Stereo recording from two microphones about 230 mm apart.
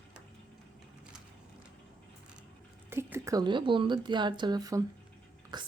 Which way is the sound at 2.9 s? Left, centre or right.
Centre.